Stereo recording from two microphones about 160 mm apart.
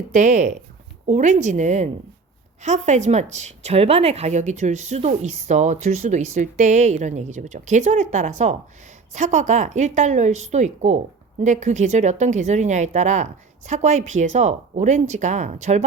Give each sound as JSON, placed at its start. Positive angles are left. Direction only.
{"t": 0.1, "sound": "a woman's voice", "side_deg": -50}